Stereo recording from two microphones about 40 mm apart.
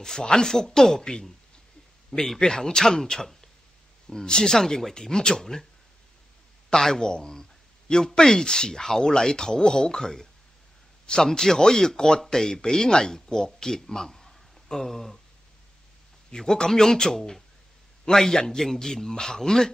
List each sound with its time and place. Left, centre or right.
0.0 s speech: centre
6.7 s speech: centre
11.2 s speech: centre
16.3 s speech: centre